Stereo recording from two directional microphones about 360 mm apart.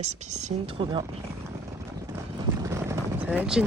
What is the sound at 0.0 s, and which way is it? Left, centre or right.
Speech, centre.